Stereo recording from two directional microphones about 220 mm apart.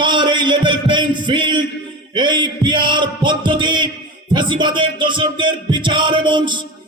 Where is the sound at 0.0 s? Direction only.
20° right (ahead or behind).